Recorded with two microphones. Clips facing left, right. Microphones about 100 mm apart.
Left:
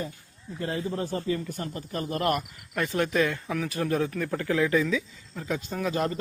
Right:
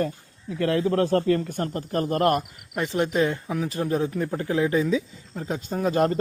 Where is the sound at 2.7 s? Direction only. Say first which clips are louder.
Right 2 dB; 20° right (ahead or behind).